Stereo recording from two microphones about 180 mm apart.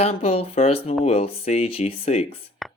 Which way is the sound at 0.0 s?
35° left (ahead or behind).